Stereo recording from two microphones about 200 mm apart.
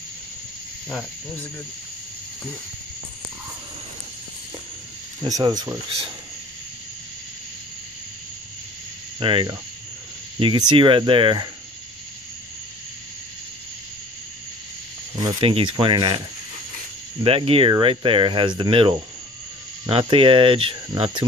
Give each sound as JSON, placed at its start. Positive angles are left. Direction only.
{"t": 0.8, "sound": "cricket", "side_deg": 5}
{"t": 5.2, "sound": "speech", "side_deg": -20}
{"t": 9.2, "sound": "speech", "side_deg": -25}
{"t": 10.7, "sound": "speech", "side_deg": -25}
{"t": 15.1, "sound": "speech", "side_deg": -25}
{"t": 17.2, "sound": "speech", "side_deg": -30}